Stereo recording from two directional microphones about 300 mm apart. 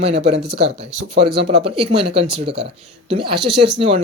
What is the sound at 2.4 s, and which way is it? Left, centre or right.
Speech, right.